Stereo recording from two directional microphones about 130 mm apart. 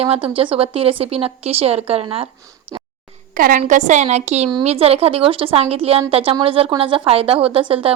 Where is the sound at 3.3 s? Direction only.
90° right.